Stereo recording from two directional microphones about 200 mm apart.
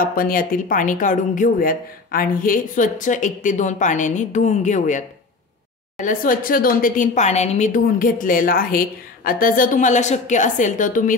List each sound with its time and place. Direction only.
0.0 s a woman's voice: 45° left (ahead or behind)